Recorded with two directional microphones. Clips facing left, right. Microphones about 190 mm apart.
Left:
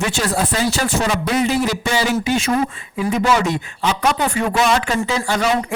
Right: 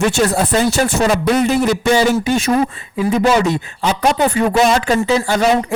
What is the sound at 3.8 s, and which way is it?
Speech, 35° right (ahead or behind).